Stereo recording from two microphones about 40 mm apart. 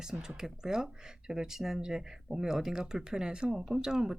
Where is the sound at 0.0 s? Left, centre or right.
Centre.